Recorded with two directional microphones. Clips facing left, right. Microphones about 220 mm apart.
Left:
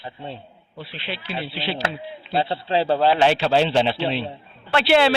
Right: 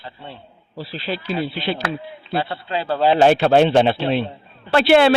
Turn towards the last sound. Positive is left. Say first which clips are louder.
# right 4 dB
turn(degrees=-50)  # may be behind; listen again after turning